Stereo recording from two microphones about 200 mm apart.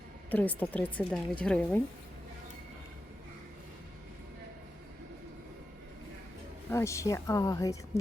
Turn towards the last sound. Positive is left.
turn(degrees=15)  # may be behind; listen again after turning